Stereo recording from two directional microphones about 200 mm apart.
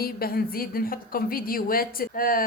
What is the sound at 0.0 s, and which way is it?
A woman's voice, 50° left (ahead or behind).